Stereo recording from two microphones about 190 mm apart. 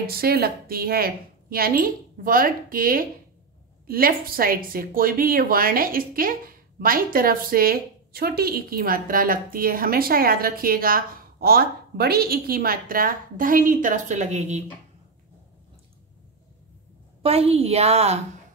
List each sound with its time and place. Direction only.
0.0 s speech: 55° right (ahead or behind)
17.2 s a woman's voice: 30° right (ahead or behind)